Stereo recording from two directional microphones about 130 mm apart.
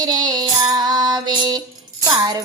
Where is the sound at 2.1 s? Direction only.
30° right (ahead or behind).